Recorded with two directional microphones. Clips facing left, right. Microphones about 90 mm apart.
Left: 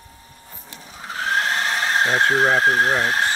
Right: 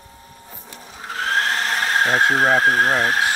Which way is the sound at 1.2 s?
15° left (ahead or behind).